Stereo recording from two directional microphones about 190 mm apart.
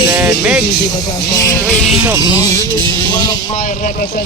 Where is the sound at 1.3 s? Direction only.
20° left (ahead or behind).